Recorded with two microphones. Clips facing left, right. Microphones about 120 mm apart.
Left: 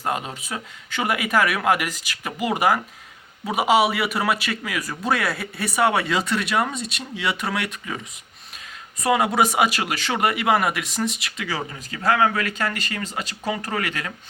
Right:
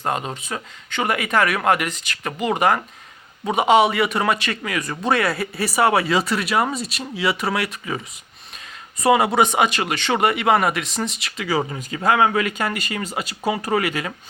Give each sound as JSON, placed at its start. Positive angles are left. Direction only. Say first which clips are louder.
{"t": 0.0, "sound": "a man's voice", "louder": "right 2 dB", "side_deg": 5}
{"t": 11.7, "sound": "a man's voice", "louder": "right 2 dB", "side_deg": -20}